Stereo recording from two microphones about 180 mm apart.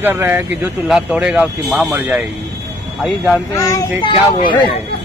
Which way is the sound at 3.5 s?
20° left (ahead or behind).